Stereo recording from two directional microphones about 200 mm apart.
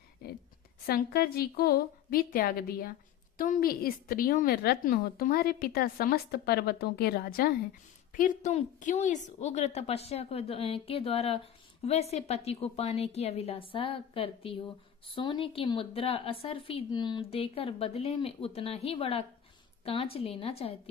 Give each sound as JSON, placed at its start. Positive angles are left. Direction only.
{"t": 0.9, "sound": "a woman's voice", "side_deg": 50}